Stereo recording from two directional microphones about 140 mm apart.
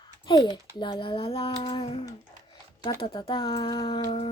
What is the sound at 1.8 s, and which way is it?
Music, 50° left (ahead or behind).